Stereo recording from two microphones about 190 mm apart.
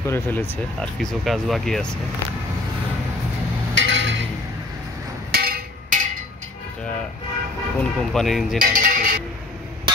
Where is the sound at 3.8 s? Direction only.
70° right (ahead or behind).